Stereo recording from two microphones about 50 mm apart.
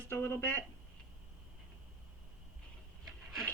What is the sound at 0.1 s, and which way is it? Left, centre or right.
Speech, left.